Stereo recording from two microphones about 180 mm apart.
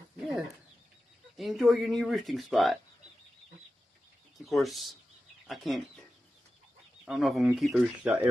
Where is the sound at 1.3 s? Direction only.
Centre (ahead or behind).